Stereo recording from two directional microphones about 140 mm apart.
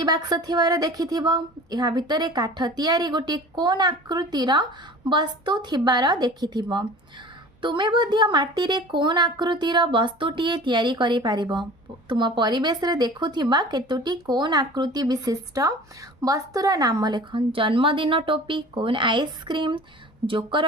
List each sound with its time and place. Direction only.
0.0 s a woman's voice: 30° right (ahead or behind)